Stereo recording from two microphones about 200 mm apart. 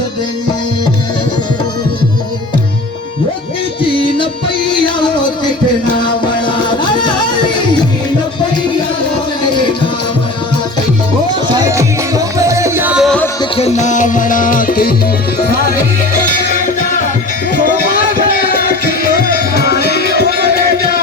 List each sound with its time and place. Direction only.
3.8 s music: 25° left (ahead or behind)
11.5 s music: 15° right (ahead or behind)
13.4 s music: 30° left (ahead or behind)
16.2 s music: 40° left (ahead or behind)
20.6 s a sound: 50° left (ahead or behind)